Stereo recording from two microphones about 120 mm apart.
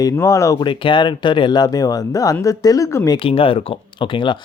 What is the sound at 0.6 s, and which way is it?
Speech, 40° left (ahead or behind).